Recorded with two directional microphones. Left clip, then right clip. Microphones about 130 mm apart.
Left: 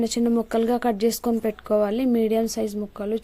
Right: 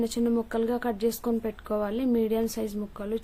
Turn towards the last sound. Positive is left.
turn(degrees=35)  # may be behind; listen again after turning